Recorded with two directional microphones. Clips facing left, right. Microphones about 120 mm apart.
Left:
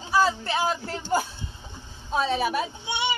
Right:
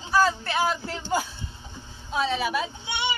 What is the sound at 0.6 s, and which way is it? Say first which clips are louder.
Speech: even; 45° left (ahead or behind).